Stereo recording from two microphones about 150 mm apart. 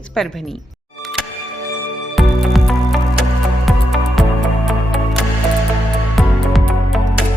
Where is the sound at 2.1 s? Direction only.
Centre (ahead or behind).